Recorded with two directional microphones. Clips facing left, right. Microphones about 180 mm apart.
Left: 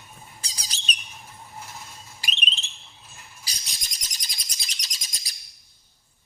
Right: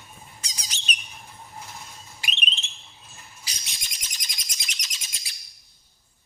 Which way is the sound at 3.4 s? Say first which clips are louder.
Even; 35° left (ahead or behind).